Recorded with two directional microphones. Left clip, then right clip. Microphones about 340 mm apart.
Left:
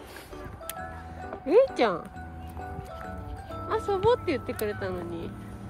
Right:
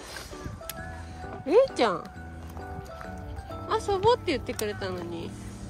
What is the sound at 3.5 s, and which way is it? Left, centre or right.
Speech, centre.